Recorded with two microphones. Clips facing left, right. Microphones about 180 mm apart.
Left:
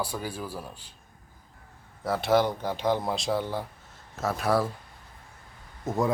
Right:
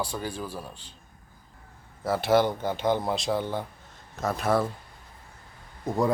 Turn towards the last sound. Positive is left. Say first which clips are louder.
# right 1 dB
turn(degrees=0)  # may be behind; listen again after turning